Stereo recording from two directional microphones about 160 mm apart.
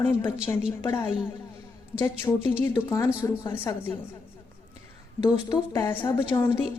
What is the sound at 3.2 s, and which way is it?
Speech, 25° left (ahead or behind).